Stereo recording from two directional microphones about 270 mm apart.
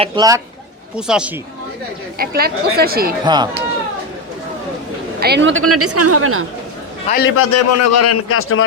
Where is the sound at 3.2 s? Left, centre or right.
Centre.